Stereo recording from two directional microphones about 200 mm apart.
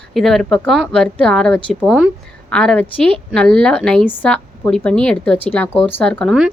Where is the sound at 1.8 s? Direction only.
5° right (ahead or behind).